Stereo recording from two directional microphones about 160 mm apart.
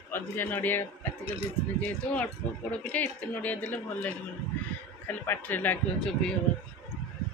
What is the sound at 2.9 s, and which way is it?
Speech, 10° left (ahead or behind).